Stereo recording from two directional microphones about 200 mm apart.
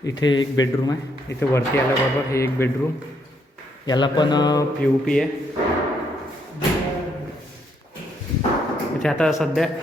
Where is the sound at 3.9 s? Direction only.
20° left (ahead or behind).